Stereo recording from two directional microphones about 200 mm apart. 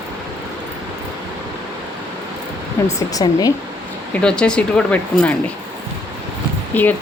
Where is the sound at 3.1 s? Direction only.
20° left (ahead or behind).